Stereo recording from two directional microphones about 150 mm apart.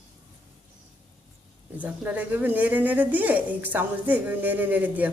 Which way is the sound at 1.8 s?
10° right (ahead or behind).